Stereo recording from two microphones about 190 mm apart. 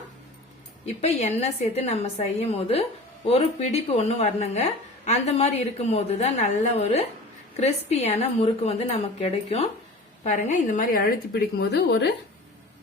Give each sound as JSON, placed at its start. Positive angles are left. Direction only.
{"t": 1.0, "sound": "a woman's voice", "side_deg": 35}